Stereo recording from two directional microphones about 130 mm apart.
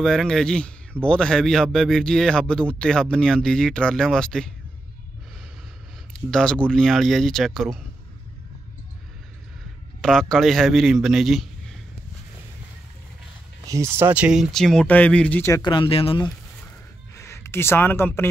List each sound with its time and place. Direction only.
0.0 s a man's voice: 5° left (ahead or behind)
6.1 s a man's voice: 5° left (ahead or behind)
10.0 s a man's voice: 5° left (ahead or behind)
13.7 s a man's voice: 20° right (ahead or behind); by 15.4 s 10° left (ahead or behind)
15.6 s speech: 40° left (ahead or behind)
17.1 s speech: 20° left (ahead or behind)